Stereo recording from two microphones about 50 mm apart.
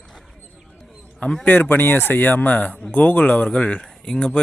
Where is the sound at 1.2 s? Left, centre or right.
Left.